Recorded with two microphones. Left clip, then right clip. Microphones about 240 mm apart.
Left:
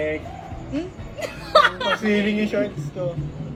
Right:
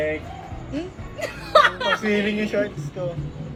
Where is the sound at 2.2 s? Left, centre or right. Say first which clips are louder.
Left 1 dB; left.